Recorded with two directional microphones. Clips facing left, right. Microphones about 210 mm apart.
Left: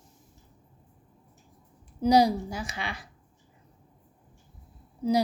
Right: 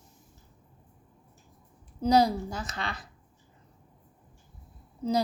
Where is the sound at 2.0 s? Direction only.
15° left (ahead or behind).